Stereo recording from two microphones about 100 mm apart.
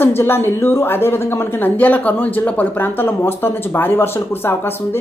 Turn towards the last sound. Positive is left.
turn(degrees=20)  # may be behind; listen again after turning